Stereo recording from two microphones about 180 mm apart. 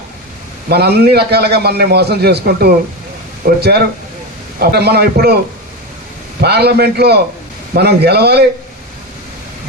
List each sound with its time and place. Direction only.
0.7 s a man's voice: 65° right (ahead or behind)
6.4 s a man's voice: 65° right (ahead or behind)